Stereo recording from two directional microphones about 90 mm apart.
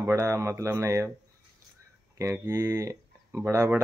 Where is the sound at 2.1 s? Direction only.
35° right (ahead or behind).